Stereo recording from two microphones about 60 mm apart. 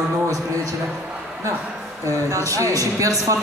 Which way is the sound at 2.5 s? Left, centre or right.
Right.